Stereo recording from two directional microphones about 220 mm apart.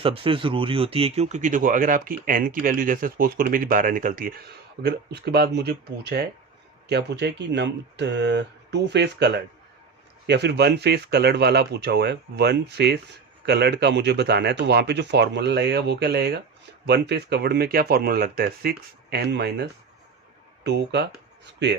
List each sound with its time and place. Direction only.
0.0 s speech: 25° right (ahead or behind); by 19.6 s 50° right (ahead or behind)
20.7 s speech: 50° right (ahead or behind)